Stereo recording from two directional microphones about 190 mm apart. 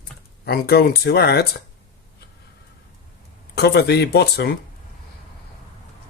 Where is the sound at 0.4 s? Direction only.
55° left (ahead or behind).